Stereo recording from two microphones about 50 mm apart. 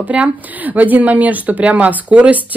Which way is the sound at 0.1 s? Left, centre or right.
Right.